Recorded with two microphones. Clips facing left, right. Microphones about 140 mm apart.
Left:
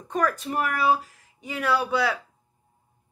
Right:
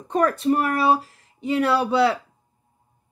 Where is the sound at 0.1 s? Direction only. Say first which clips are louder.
Right 6 dB; 30° right (ahead or behind).